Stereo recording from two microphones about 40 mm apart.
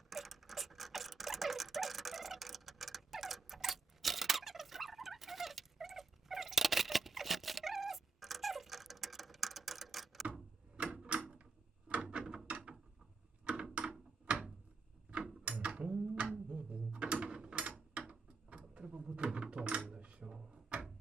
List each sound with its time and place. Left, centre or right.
0.1 s dog: centre
10.8 s a sound: right
12.1 s mechanisms: right
13.4 s a sound: right
18.1 s mechanisms: right
19.9 s drawer open or close: right